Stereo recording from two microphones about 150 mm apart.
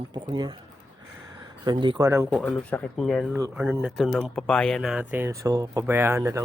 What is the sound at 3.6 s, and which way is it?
Speech, 5° right (ahead or behind).